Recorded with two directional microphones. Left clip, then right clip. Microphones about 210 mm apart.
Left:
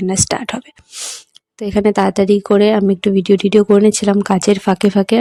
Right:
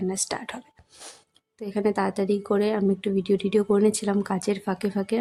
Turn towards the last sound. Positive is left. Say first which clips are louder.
# left 13 dB
turn(degrees=40)  # may be behind; listen again after turning